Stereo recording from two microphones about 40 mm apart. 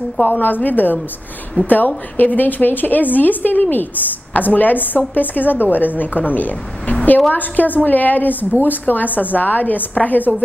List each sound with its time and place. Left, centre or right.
0.2 s a woman's voice: left